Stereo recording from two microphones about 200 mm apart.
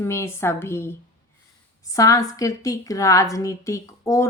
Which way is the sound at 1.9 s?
15° left (ahead or behind).